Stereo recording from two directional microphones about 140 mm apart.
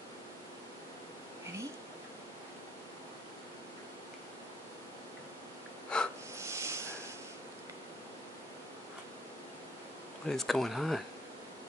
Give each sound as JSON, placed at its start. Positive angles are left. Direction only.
{"t": 5.9, "sound": "snort", "side_deg": 5}
{"t": 6.3, "sound": "a sound", "side_deg": -20}
{"t": 10.2, "sound": "speech", "side_deg": 5}